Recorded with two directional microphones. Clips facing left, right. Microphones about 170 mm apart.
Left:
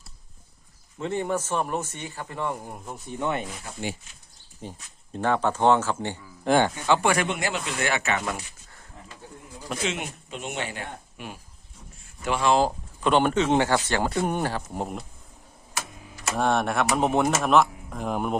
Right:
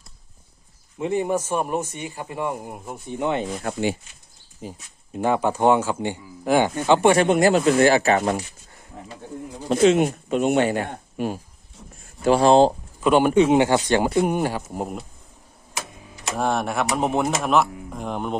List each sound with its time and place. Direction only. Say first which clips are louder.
0.9 s speech: right 4 dB; 10° right (ahead or behind)
3.6 s speech: right 9 dB; 80° right
4.6 s speech: right 3 dB; 5° right (ahead or behind)
6.8 s speech: right 6 dB; 20° right (ahead or behind)
7.3 s speech: right 13 dB; 40° right (ahead or behind)
9.8 s speech: right 16 dB; 45° right (ahead or behind)
13.0 s speech: right 5 dB; 10° right (ahead or behind)
16.2 s speech: even; centre (ahead or behind)